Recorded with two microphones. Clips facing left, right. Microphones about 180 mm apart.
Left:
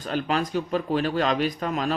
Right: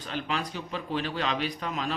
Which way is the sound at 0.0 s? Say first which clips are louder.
Left 7 dB; 45° left (ahead or behind).